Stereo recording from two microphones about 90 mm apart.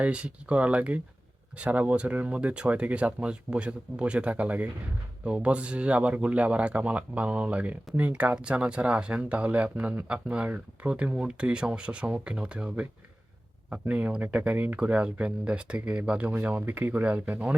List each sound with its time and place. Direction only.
0.0 s speech: 15° right (ahead or behind)